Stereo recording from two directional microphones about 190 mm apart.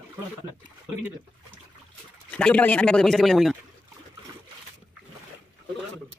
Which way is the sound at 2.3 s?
5° left (ahead or behind).